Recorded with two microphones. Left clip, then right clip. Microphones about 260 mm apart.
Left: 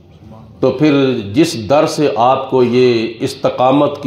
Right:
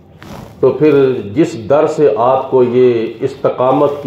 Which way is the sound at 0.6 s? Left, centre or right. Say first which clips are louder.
Right 3 dB; left.